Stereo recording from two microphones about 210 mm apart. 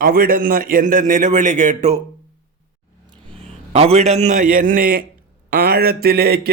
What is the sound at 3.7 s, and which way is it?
A man's voice, 30° right (ahead or behind).